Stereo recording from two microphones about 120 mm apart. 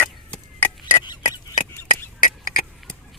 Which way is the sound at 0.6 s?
20° left (ahead or behind).